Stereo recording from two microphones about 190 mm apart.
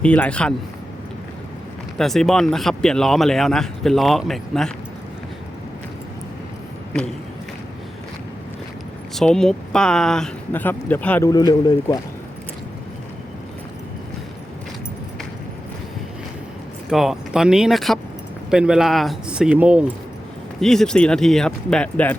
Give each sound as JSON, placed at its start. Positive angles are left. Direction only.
{"t": 0.0, "sound": "speech", "side_deg": 5}
{"t": 2.0, "sound": "speech", "side_deg": 0}
{"t": 9.1, "sound": "speech", "side_deg": 5}
{"t": 11.3, "sound": "speech", "side_deg": 20}
{"t": 16.9, "sound": "speech", "side_deg": 0}